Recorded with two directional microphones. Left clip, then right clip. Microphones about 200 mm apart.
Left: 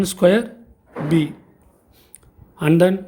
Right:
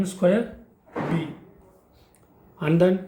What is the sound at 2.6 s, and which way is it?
Speech, 40° left (ahead or behind).